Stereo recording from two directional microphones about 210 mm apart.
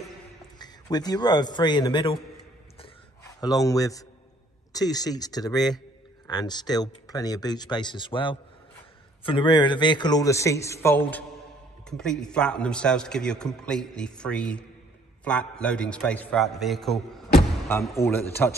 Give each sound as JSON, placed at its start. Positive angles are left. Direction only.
{"t": 0.6, "sound": "a man's voice", "side_deg": 20}
{"t": 3.3, "sound": "speech", "side_deg": 15}
{"t": 12.0, "sound": "a man's voice", "side_deg": 5}
{"t": 17.6, "sound": "speech", "side_deg": 15}